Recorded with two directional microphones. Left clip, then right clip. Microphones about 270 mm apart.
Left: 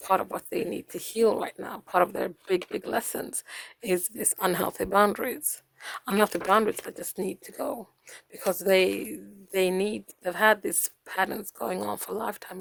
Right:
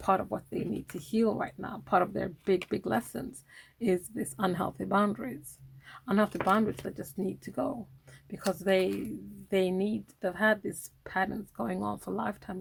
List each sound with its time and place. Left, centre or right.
0.1 s a woman's voice: left